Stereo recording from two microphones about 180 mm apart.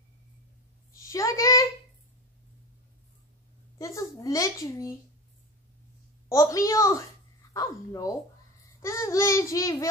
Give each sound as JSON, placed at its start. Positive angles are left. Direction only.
{"t": 1.1, "sound": "a sound", "side_deg": 15}
{"t": 3.7, "sound": "speech", "side_deg": 15}
{"t": 6.2, "sound": "a child's voice", "side_deg": 15}